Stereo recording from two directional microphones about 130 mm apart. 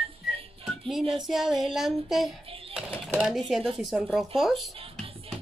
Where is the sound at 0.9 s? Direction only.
Centre (ahead or behind).